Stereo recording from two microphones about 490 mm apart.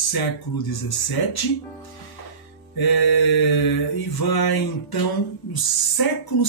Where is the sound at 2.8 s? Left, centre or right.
Left.